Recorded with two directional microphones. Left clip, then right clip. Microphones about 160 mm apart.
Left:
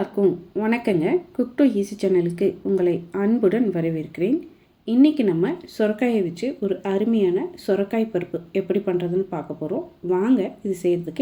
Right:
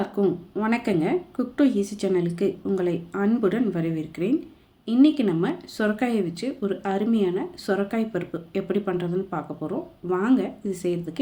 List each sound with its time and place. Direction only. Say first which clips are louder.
0.0 s speech: left 3 dB; 10° left (ahead or behind)